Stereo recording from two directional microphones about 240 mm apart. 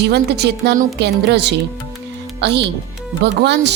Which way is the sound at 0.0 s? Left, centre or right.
Right.